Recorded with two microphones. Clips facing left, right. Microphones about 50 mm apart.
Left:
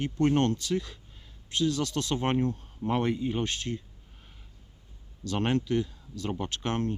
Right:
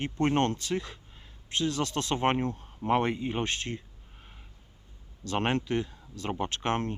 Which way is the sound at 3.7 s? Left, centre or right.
Right.